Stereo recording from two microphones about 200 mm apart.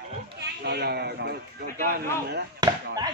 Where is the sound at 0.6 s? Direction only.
55° right (ahead or behind).